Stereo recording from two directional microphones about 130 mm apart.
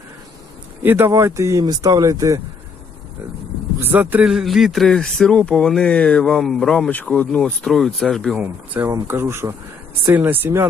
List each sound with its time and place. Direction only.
0.8 s speech: 15° right (ahead or behind)
3.8 s speech: 15° right (ahead or behind)
4.3 s speech: centre (ahead or behind)
8.4 s speech: 15° right (ahead or behind)